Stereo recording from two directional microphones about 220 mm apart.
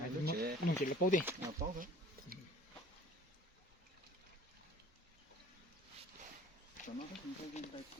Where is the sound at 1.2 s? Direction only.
10° right (ahead or behind).